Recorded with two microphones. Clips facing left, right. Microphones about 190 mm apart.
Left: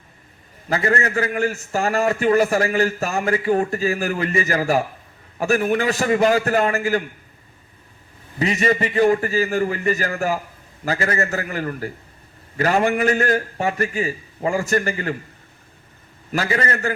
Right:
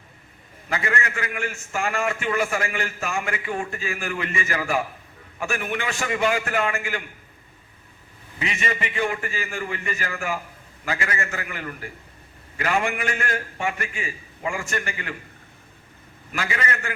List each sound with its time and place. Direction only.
0.7 s a man's voice: 35° left (ahead or behind)
8.4 s a man's voice: 40° left (ahead or behind)
16.3 s a man's voice: 40° left (ahead or behind)